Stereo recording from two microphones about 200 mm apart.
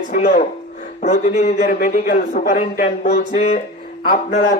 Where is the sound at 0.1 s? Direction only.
40° left (ahead or behind).